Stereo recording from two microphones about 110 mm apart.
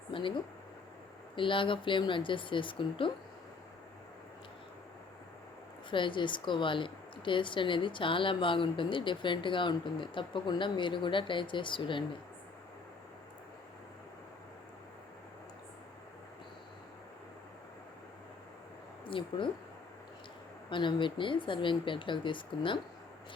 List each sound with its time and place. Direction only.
0.1 s speech: 50° left (ahead or behind)
1.4 s a woman's voice: 50° left (ahead or behind)
5.9 s a woman's voice: 50° left (ahead or behind)
19.0 s speech: 50° left (ahead or behind)
20.7 s a woman's voice: 45° left (ahead or behind)